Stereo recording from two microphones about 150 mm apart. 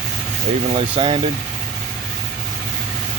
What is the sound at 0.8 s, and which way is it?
Speech, 35° right (ahead or behind).